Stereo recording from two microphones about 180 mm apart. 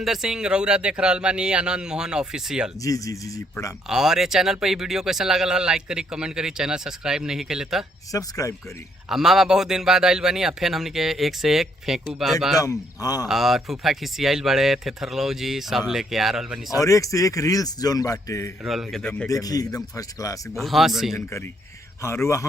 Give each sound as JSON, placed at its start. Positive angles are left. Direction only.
{"t": 0.0, "sound": "speech", "side_deg": 0}
{"t": 2.8, "sound": "speech", "side_deg": 20}
{"t": 3.8, "sound": "speech", "side_deg": -5}
{"t": 8.1, "sound": "speech", "side_deg": 20}
{"t": 9.0, "sound": "speech", "side_deg": 0}
{"t": 12.5, "sound": "speech", "side_deg": 20}
{"t": 13.2, "sound": "speech", "side_deg": 0}
{"t": 16.7, "sound": "speech", "side_deg": 20}
{"t": 18.6, "sound": "speech", "side_deg": 0}
{"t": 19.3, "sound": "speech", "side_deg": 20}
{"t": 20.6, "sound": "speech", "side_deg": 0}
{"t": 21.2, "sound": "speech", "side_deg": 15}